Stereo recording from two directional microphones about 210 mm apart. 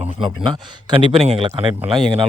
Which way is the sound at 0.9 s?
25° right (ahead or behind).